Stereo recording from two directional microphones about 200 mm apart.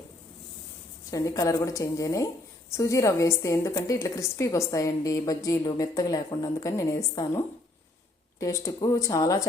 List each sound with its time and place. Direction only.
1.1 s a woman's voice: 20° left (ahead or behind)